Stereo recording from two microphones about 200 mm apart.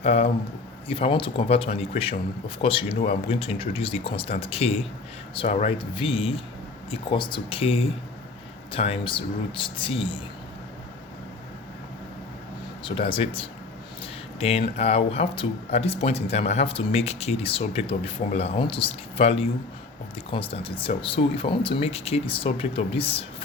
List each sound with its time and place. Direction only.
0.0 s a man's voice: 30° left (ahead or behind)
12.8 s speech: 25° left (ahead or behind)